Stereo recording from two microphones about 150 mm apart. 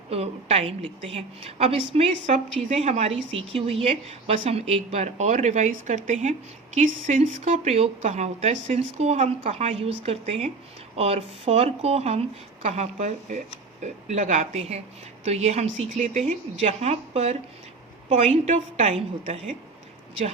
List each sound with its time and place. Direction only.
0.1 s a woman's voice: 45° right (ahead or behind)